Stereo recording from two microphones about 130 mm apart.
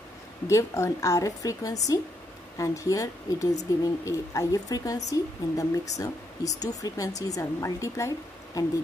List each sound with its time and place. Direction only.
0.5 s a woman's voice: 25° left (ahead or behind)